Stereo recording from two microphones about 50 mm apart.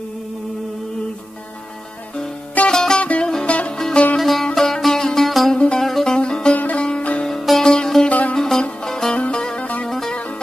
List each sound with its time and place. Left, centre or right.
2.7 s music: centre
3.0 s music: left
3.7 s music: centre
5.5 s music: centre
5.9 s music: centre
6.1 s music: centre
6.5 s music: left
7.2 s sitar: centre
7.6 s music: centre
8.1 s music: left
8.4 s music: centre